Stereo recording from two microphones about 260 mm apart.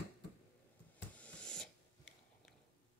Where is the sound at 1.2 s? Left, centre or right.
Centre.